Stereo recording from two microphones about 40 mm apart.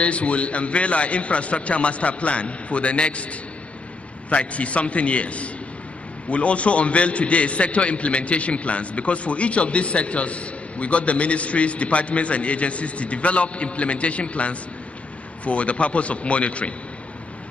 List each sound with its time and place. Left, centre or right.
0.0 s a man's voice: left
4.5 s a man's voice: left